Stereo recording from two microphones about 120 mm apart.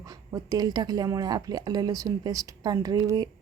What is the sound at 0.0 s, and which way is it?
Speech, 30° right (ahead or behind).